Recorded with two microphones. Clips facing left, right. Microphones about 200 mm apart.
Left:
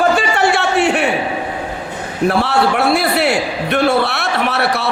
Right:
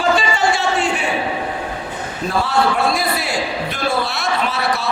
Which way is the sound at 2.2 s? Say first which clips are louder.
Left 4 dB; 70° left (ahead or behind).